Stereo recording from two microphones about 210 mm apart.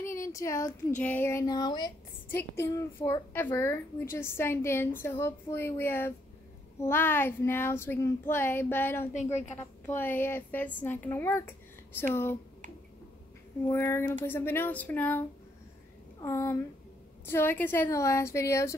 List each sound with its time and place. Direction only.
0.0 s a sound: 15° left (ahead or behind)
0.9 s child singing: 10° left (ahead or behind)
3.0 s a child's voice: 20° left (ahead or behind)
3.4 s child singing: 15° left (ahead or behind)
9.1 s a woman's voice: 35° left (ahead or behind)
9.6 s child singing: 10° left (ahead or behind)
13.7 s child singing: 10° left (ahead or behind)